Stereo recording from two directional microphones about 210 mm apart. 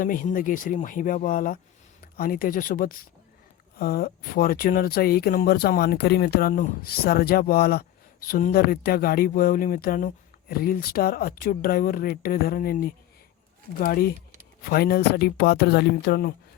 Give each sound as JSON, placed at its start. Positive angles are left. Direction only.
{"t": 0.0, "sound": "speech", "side_deg": 40}